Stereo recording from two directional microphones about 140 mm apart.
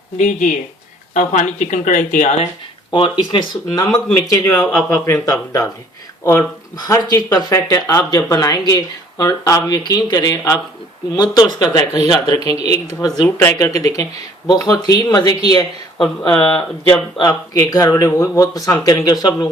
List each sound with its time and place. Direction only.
0.2 s speech: 60° left (ahead or behind)
2.9 s speech: 35° left (ahead or behind)
3.9 s speech: 25° left (ahead or behind)
6.7 s speech: 25° left (ahead or behind)
12.5 s speech: 50° right (ahead or behind)
12.9 s speech: 30° left (ahead or behind)